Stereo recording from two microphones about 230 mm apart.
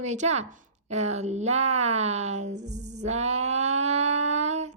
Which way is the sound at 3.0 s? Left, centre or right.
Right.